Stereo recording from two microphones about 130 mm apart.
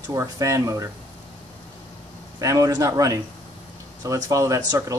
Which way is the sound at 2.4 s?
25° right (ahead or behind).